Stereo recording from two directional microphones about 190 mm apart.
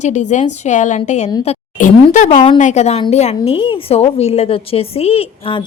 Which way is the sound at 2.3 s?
25° left (ahead or behind).